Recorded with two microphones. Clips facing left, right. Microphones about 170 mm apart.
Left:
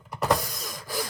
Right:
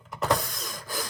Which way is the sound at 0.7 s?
Centre (ahead or behind).